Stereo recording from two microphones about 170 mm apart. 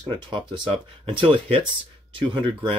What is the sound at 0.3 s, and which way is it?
Speech, 30° right (ahead or behind).